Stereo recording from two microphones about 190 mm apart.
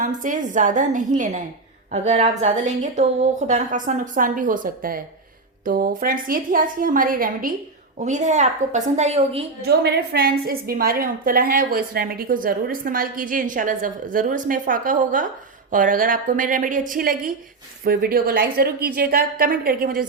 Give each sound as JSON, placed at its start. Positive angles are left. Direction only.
{"t": 0.0, "sound": "a woman's voice", "side_deg": -40}
{"t": 9.6, "sound": "a woman's voice", "side_deg": -60}